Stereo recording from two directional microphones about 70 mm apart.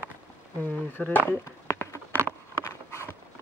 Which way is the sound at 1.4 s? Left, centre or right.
Left.